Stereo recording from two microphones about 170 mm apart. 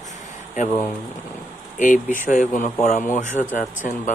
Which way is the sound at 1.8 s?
50° left (ahead or behind).